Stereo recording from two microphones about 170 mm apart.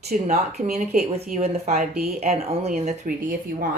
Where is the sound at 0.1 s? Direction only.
40° right (ahead or behind).